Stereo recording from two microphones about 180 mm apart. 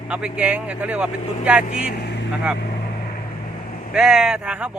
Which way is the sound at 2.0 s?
70° left (ahead or behind).